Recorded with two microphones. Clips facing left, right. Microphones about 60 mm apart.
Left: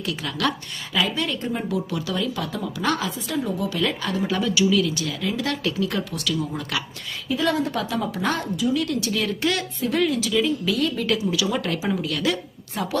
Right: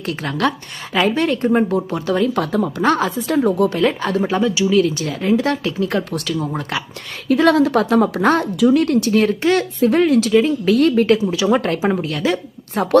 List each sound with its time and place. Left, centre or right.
0.0 s speech: right
1.9 s speech: right
3.2 s speech: right
3.8 s speech: right
4.3 s speech: right
7.3 s a woman's voice: right
7.8 s speech: right
11.0 s speech: right